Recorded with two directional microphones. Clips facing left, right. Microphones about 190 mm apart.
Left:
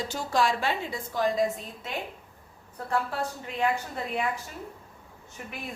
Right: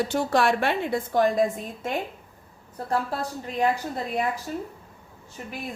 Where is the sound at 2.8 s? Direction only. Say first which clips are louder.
Right 2 dB; 40° right (ahead or behind).